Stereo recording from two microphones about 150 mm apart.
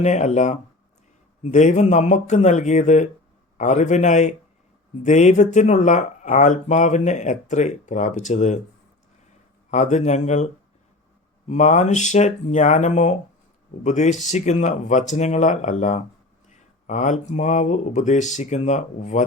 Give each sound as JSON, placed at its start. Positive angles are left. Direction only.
{"t": 0.0, "sound": "speech", "side_deg": 50}
{"t": 9.7, "sound": "speech", "side_deg": 50}